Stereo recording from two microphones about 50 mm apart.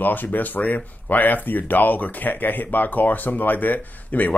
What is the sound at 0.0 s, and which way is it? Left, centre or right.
Speech, left.